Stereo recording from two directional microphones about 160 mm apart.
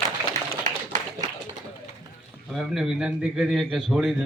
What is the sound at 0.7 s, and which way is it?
Clapping, 50° right (ahead or behind).